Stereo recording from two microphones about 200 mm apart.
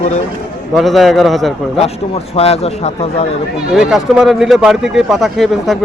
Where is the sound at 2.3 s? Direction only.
30° left (ahead or behind).